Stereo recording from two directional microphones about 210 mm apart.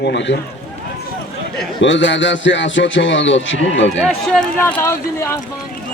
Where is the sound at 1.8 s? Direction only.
60° left (ahead or behind).